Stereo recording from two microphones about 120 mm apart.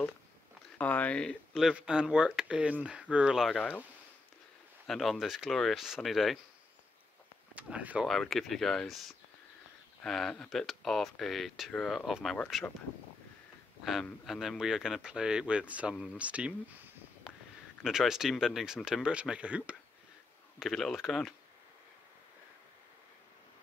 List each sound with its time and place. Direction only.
0.7 s speech: 10° left (ahead or behind)
4.8 s speech: centre (ahead or behind)
7.5 s speech: 10° right (ahead or behind)
8.1 s speech: centre (ahead or behind)
14.2 s speech: centre (ahead or behind)
17.3 s a sound: 5° right (ahead or behind)
17.8 s speech: 5° right (ahead or behind)